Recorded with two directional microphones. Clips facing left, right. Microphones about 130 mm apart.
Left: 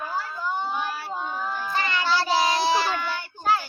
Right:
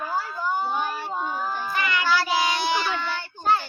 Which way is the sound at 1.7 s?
30° left (ahead or behind).